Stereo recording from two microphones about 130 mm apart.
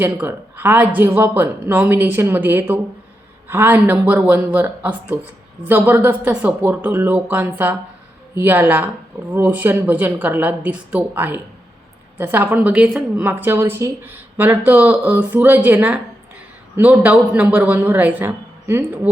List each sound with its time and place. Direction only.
0.0 s speech: 15° right (ahead or behind)